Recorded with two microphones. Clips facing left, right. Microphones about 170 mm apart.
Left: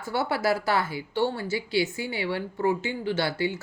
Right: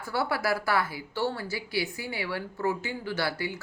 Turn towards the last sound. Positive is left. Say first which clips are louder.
# left 4 dB
turn(degrees=25)  # may be behind; listen again after turning